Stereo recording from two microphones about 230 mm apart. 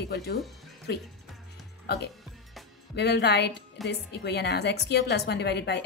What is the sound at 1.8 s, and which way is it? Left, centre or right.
A woman's voice, left.